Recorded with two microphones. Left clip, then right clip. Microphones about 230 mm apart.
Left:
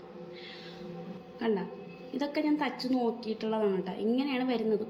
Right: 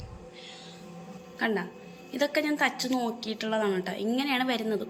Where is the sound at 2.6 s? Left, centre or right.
Right.